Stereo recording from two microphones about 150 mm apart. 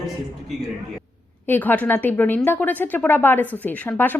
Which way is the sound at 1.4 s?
15° left (ahead or behind).